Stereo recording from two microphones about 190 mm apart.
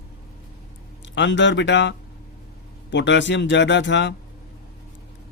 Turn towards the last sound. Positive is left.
turn(degrees=70)  # may be behind; listen again after turning